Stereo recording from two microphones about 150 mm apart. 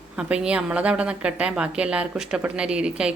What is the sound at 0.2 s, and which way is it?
A woman's voice, 5° right (ahead or behind).